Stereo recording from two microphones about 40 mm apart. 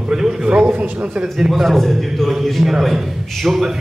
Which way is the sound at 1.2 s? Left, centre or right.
Centre.